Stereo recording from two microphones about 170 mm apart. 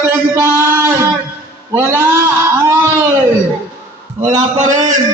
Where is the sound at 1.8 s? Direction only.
15° right (ahead or behind).